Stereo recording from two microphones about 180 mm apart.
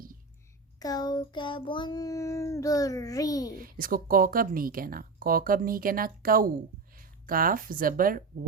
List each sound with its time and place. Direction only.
0.8 s child singing: 20° left (ahead or behind)
3.6 s speech: 50° right (ahead or behind)